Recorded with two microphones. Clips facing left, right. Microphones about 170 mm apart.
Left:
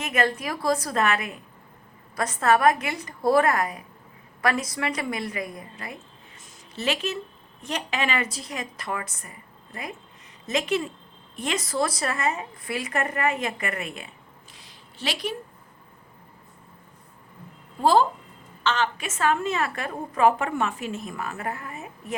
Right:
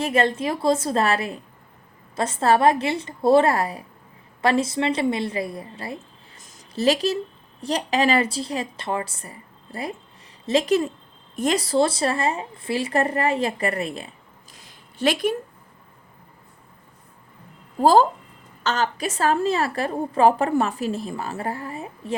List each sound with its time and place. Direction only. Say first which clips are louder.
0.0 s a woman's voice: right 4 dB; 30° right (ahead or behind)
14.5 s a sound: right 1 dB; 50° right (ahead or behind)
17.7 s a woman's voice: right 4 dB; 40° right (ahead or behind)